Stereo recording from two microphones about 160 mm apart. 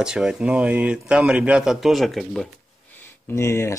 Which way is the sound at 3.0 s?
15° left (ahead or behind).